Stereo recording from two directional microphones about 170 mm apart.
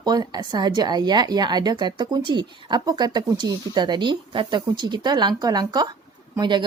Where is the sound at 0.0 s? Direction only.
25° right (ahead or behind).